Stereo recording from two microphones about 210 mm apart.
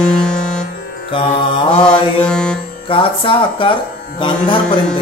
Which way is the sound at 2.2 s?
5° left (ahead or behind).